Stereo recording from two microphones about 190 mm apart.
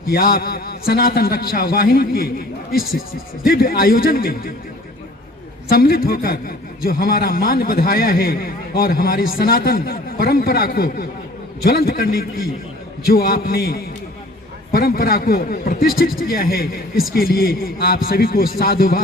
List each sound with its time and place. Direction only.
0.0 s a man's voice: 50° left (ahead or behind)
3.4 s a man's voice: 50° left (ahead or behind)
5.6 s a man's voice: 50° left (ahead or behind)